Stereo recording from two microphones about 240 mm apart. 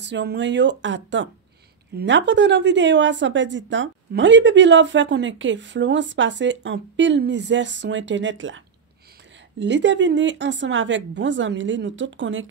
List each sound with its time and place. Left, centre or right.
0.0 s a woman's voice: right